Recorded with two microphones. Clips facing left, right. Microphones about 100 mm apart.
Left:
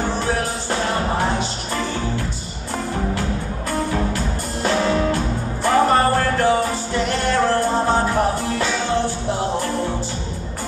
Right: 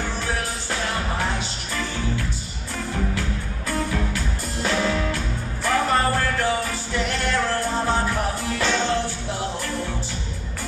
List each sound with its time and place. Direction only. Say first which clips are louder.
0.0 s music: left 6 dB; 25° left (ahead or behind)
3.7 s music: left 4 dB; 30° left (ahead or behind)
8.6 s music: even; 5° left (ahead or behind)
8.9 s music: left 5 dB; 20° left (ahead or behind)